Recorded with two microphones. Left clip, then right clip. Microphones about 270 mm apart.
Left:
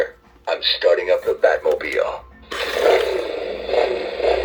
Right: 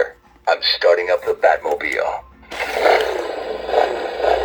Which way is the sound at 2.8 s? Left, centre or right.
Centre.